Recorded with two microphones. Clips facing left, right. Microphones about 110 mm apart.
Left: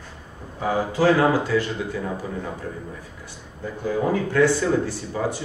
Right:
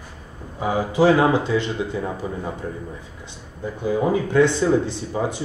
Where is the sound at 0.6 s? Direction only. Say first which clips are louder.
Right 2 dB; 15° right (ahead or behind).